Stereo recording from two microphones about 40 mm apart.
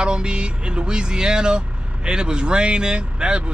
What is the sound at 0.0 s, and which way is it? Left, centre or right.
Speech, right.